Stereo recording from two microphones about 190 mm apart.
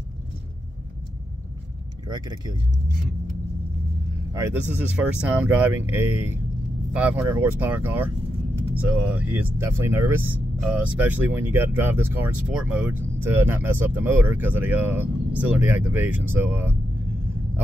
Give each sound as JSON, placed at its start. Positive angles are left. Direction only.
{"t": 2.0, "sound": "speech", "side_deg": -20}
{"t": 4.3, "sound": "speech", "side_deg": -15}
{"t": 9.1, "sound": "speech", "side_deg": -10}